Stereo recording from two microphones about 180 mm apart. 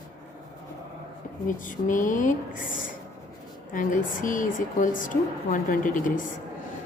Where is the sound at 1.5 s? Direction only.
45° left (ahead or behind).